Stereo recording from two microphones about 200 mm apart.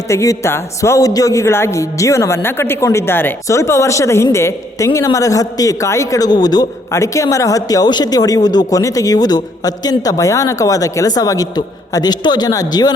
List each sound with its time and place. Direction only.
0.1 s a woman's voice: 15° left (ahead or behind)